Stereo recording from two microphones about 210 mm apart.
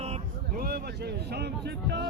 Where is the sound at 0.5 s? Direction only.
45° right (ahead or behind).